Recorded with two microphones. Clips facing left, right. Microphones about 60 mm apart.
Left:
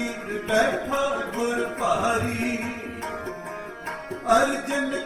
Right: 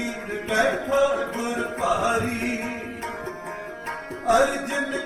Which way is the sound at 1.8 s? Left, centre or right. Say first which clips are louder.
Right 1 dB; left.